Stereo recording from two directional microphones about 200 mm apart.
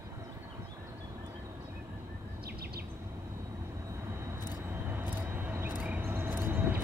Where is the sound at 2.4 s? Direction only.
50° right (ahead or behind).